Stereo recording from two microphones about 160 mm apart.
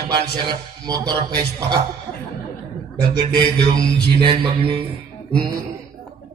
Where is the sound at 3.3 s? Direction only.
30° right (ahead or behind).